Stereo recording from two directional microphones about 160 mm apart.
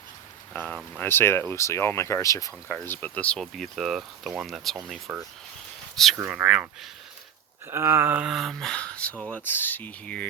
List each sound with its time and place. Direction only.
0.9 s speech: 15° left (ahead or behind); by 6.7 s 5° right (ahead or behind)
7.7 s speech: 15° right (ahead or behind); by 10.2 s 10° left (ahead or behind)